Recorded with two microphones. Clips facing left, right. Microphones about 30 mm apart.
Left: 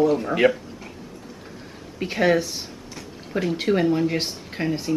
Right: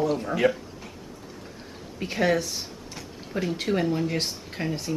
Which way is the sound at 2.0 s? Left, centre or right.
Centre.